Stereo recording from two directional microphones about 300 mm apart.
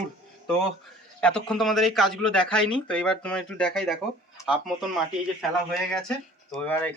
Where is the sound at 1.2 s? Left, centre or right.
Centre.